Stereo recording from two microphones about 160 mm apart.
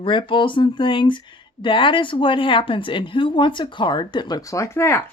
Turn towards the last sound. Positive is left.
turn(degrees=15)  # may be behind; listen again after turning